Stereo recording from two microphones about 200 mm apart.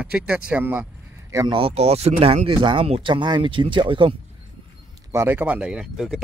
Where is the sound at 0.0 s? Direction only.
5° right (ahead or behind); by 4.2 s 25° right (ahead or behind).